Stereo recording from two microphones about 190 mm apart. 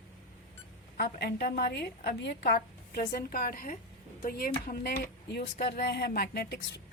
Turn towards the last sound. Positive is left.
turn(degrees=60)  # may be behind; listen again after turning